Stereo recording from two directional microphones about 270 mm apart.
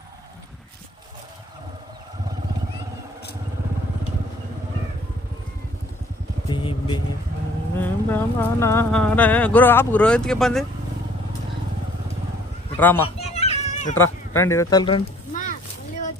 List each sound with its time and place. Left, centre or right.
6.5 s vehicle: centre
7.8 s speech: centre
12.7 s speech: centre
13.1 s a sound: left
13.9 s speech: centre; by 15.5 s left